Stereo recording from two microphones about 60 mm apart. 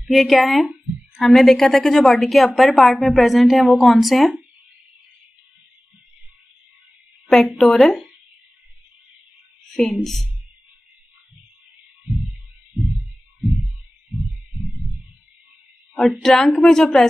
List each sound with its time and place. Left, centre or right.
0.1 s speech: centre
7.2 s a woman's voice: centre
9.7 s a sound: centre
10.0 s speech: centre
12.7 s heart murmur: centre
15.9 s a woman's voice: centre